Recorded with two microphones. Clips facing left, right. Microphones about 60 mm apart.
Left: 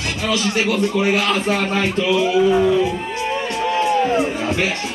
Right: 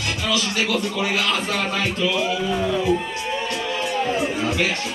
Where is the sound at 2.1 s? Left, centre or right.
Centre.